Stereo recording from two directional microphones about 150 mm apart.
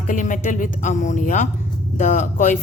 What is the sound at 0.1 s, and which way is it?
A woman's voice, 60° left (ahead or behind).